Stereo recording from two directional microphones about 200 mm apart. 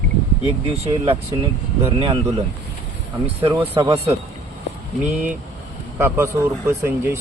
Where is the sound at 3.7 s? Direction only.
20° right (ahead or behind).